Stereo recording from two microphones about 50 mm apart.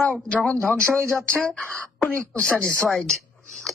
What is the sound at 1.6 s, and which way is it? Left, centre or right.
Speech, left.